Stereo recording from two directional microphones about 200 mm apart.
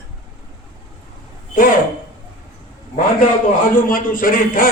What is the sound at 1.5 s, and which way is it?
Speech, 45° left (ahead or behind).